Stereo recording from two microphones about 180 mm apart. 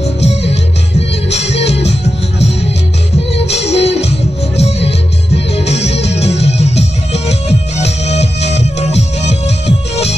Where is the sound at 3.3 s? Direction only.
35° left (ahead or behind).